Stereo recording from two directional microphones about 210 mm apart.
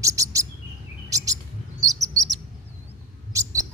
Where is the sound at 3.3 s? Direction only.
15° right (ahead or behind).